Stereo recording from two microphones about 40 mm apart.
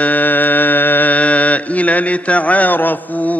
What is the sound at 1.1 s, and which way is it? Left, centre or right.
Mantra, left.